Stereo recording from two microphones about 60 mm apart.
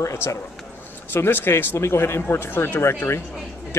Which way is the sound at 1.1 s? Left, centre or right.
Left.